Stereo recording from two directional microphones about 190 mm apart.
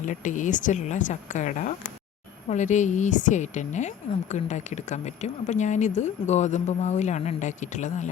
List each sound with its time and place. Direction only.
0.0 s a woman's voice: 40° left (ahead or behind)